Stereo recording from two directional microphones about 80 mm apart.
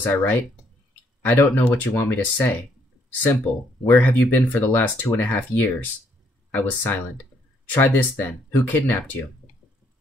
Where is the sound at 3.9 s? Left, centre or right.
Left.